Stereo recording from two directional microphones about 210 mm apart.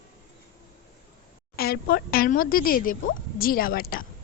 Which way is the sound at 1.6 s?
45° left (ahead or behind).